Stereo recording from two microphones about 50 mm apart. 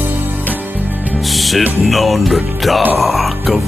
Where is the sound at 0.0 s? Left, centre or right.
Right.